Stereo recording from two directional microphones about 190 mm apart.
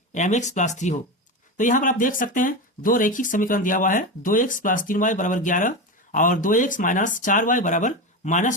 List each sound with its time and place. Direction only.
0.1 s speech: 40° left (ahead or behind)